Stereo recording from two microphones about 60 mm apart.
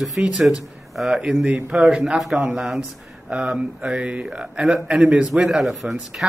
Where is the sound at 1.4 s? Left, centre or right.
Centre.